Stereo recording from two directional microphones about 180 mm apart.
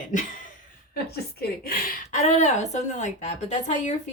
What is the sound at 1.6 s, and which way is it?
Speech, 55° left (ahead or behind).